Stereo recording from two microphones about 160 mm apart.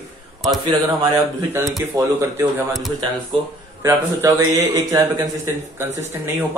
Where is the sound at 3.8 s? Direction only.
20° right (ahead or behind).